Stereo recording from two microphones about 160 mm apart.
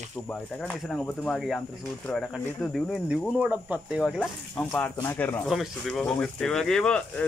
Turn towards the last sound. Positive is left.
turn(degrees=5)  # may be behind; listen again after turning